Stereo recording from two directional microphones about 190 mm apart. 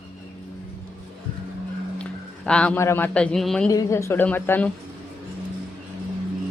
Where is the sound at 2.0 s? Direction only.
5° left (ahead or behind).